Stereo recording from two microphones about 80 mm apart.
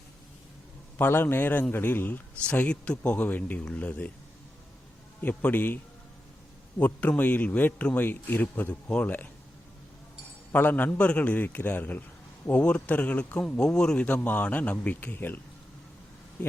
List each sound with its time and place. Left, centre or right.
0.9 s speech: left
5.2 s speech: left
10.5 s a man's voice: left
16.4 s a man's voice: centre